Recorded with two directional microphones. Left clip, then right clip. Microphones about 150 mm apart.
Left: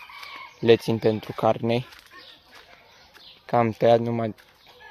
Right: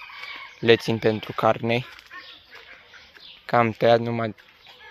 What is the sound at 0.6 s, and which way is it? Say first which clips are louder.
Speech: even; 15° left (ahead or behind).